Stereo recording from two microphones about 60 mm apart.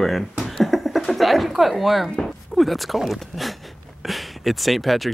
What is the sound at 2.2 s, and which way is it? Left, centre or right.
Speech, centre.